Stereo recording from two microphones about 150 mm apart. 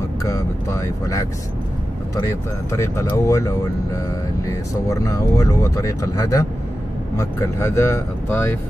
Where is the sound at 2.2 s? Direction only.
20° left (ahead or behind).